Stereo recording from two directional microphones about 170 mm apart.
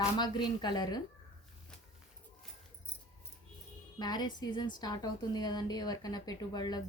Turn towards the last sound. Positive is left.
turn(degrees=25)  # may be behind; listen again after turning